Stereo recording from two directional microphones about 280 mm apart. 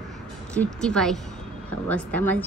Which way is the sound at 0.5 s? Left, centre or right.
Centre.